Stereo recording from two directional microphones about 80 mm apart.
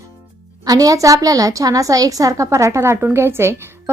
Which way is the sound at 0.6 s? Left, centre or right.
Right.